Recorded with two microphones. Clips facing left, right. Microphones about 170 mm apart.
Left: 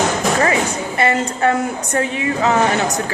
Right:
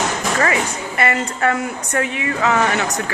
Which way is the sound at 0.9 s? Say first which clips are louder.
Left 2 dB; 30° left (ahead or behind).